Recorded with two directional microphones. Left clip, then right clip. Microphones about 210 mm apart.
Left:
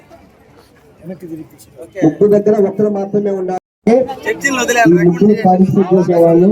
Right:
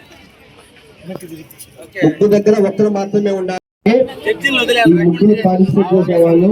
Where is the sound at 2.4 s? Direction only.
25° left (ahead or behind).